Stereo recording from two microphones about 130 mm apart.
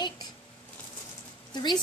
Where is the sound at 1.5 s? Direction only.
35° left (ahead or behind).